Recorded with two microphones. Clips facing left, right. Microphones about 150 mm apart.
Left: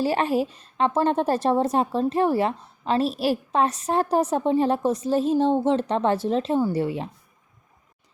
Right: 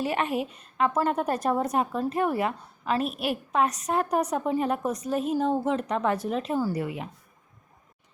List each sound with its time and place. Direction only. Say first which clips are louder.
0.0 s a woman's voice: left 5 dB; 35° left (ahead or behind)